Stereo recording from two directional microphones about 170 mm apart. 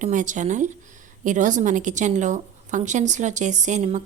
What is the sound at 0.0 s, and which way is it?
A woman's voice, 50° right (ahead or behind).